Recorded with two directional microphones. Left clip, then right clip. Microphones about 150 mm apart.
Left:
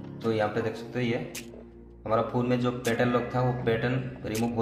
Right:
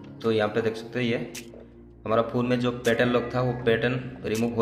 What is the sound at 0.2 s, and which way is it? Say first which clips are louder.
A man's voice: right 3 dB; 30° right (ahead or behind).